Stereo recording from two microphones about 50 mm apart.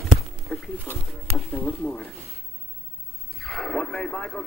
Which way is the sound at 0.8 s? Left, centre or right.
Left.